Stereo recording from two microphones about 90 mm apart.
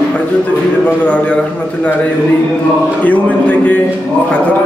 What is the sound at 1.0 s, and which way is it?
Speech, 15° left (ahead or behind).